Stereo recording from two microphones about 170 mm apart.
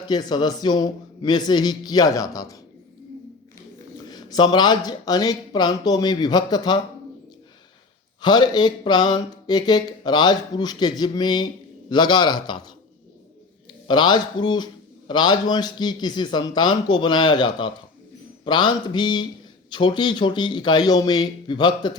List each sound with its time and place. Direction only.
0.1 s a man's voice: 25° left (ahead or behind)
4.1 s a man's voice: 25° left (ahead or behind)
8.2 s a man's voice: 25° left (ahead or behind)